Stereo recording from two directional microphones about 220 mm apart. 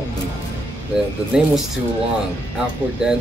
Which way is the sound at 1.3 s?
5° right (ahead or behind).